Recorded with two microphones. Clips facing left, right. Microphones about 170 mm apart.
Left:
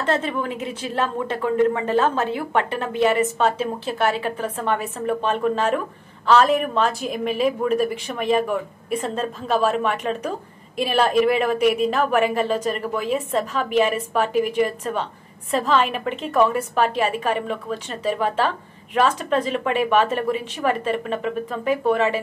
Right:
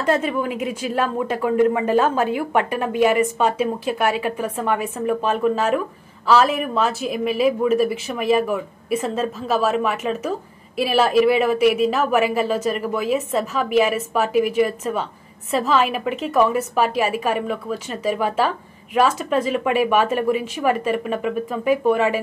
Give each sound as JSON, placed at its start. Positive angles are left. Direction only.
{"t": 0.0, "sound": "speech", "side_deg": -10}